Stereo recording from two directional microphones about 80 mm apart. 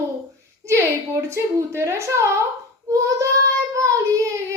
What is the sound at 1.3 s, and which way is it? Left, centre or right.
Speech, right.